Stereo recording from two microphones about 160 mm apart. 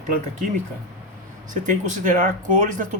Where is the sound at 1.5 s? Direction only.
50° right (ahead or behind).